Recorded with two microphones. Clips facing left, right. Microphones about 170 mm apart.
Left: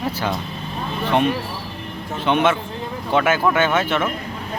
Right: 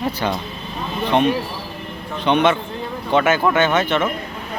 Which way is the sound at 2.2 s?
5° left (ahead or behind).